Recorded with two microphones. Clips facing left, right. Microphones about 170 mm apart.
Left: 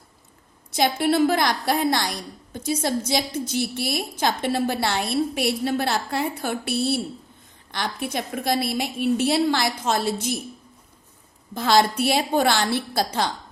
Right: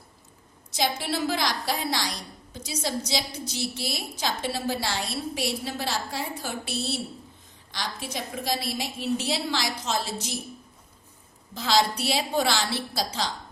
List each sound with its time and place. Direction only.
0.7 s a woman's voice: 55° left (ahead or behind)
11.5 s a woman's voice: 55° left (ahead or behind)